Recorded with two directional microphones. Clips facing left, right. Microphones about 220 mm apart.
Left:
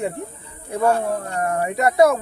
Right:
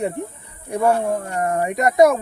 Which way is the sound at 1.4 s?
25° right (ahead or behind).